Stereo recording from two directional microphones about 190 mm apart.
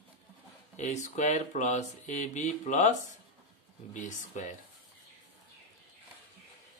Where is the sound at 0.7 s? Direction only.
40° left (ahead or behind).